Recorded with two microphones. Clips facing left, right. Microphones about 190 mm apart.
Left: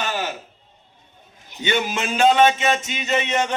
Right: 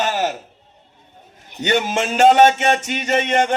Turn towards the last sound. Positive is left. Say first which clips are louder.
# right 4 dB
turn(degrees=-50)  # may be behind; listen again after turning